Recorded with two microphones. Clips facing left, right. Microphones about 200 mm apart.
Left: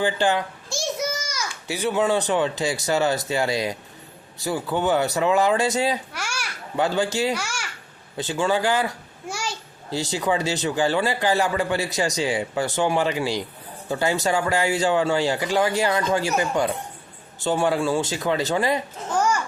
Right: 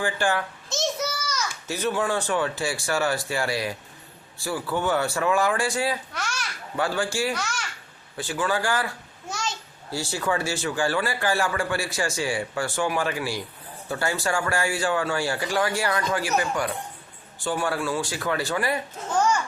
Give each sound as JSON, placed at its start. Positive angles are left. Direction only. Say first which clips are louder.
{"t": 0.0, "sound": "a child's voice", "louder": "left 4 dB", "side_deg": 20}
{"t": 6.1, "sound": "babbling", "louder": "even", "side_deg": 10}
{"t": 6.7, "sound": "speech", "louder": "left 4 dB", "side_deg": 20}
{"t": 7.3, "sound": "a child's voice", "louder": "left 1 dB", "side_deg": 10}
{"t": 8.1, "sound": "speech", "louder": "left 4 dB", "side_deg": 20}
{"t": 9.9, "sound": "speech", "louder": "left 3 dB", "side_deg": 20}